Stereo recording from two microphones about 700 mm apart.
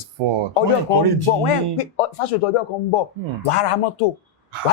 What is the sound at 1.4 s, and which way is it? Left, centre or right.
Speech, left.